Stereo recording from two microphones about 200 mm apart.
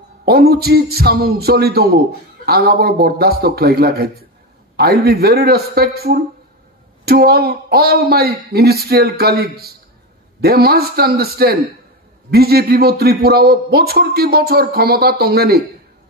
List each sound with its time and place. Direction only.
0.2 s a man's voice: 50° right (ahead or behind)